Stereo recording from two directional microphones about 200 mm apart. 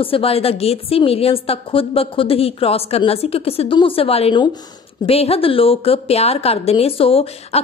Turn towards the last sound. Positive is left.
turn(degrees=30)  # may be behind; listen again after turning